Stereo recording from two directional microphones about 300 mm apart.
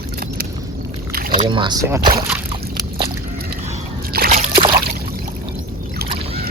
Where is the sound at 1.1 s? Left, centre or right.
Right.